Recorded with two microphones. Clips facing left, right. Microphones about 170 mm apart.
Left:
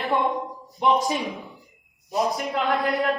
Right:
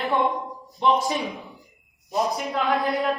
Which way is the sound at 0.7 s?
20° left (ahead or behind).